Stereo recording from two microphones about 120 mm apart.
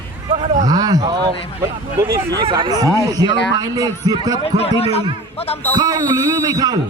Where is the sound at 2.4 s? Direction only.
40° right (ahead or behind).